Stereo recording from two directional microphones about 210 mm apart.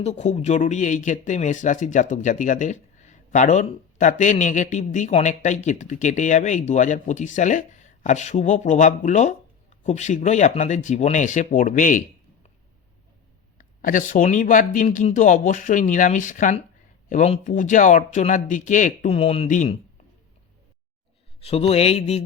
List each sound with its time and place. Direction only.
0.0 s speech: 35° left (ahead or behind)
13.6 s speech: 40° left (ahead or behind)
21.4 s speech: 30° left (ahead or behind)